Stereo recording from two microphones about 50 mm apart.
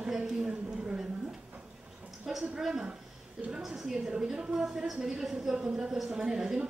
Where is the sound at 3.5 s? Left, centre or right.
Centre.